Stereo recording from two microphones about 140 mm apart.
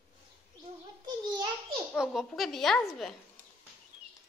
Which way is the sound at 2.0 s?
Centre (ahead or behind).